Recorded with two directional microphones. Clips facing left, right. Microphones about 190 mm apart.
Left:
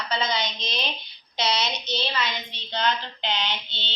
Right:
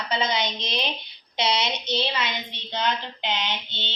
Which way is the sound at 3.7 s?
50° right (ahead or behind).